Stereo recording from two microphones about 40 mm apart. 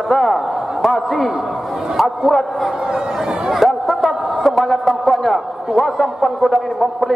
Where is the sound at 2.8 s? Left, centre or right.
Centre.